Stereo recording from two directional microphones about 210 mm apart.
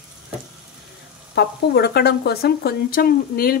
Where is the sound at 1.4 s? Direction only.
50° left (ahead or behind).